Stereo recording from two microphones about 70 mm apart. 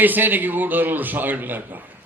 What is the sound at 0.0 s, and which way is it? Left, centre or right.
A man's voice, right.